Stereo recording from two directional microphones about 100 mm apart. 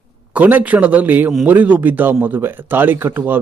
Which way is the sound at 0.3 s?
15° right (ahead or behind).